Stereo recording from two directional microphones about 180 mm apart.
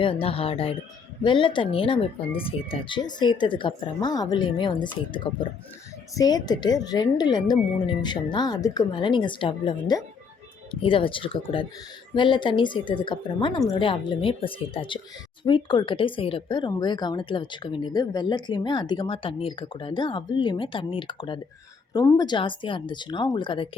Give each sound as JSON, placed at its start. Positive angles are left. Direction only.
{"t": 0.0, "sound": "speech", "side_deg": 30}